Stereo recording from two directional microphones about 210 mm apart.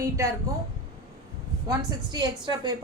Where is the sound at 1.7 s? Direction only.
20° right (ahead or behind).